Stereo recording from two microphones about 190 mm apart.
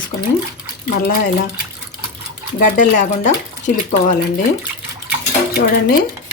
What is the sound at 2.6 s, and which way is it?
Speech, 40° left (ahead or behind).